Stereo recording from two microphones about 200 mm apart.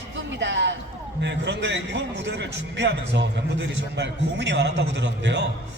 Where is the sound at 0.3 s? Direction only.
65° right (ahead or behind).